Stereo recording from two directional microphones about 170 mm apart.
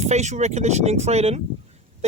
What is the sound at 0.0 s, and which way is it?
Speech, 40° right (ahead or behind).